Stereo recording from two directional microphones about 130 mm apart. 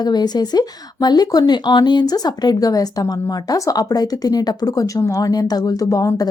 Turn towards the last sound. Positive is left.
turn(degrees=30)  # may be behind; listen again after turning